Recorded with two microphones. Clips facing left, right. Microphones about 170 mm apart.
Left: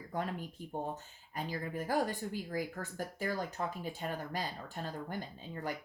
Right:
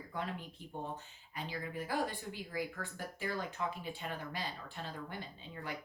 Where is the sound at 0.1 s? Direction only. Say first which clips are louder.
Left 4 dB; 45° left (ahead or behind).